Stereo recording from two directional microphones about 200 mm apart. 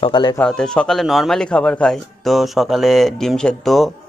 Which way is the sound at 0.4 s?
5° left (ahead or behind).